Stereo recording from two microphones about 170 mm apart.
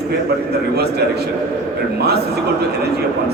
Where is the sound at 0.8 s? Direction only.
70° right (ahead or behind).